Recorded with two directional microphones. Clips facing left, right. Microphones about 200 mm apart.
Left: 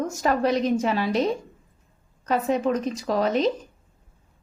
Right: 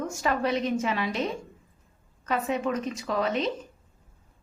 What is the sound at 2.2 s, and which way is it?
A woman's voice, 35° left (ahead or behind).